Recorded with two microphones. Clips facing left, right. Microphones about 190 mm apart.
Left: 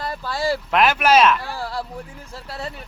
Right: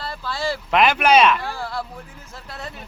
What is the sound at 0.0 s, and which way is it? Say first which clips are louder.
Boat: left 3 dB; 40° left (ahead or behind).